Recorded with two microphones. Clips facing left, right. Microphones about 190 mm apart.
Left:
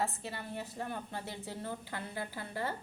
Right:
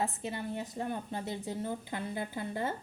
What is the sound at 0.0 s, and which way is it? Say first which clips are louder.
Speech: right 3 dB; 20° right (ahead or behind).